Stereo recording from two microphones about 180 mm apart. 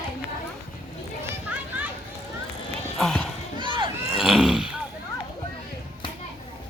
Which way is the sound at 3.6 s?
25° right (ahead or behind).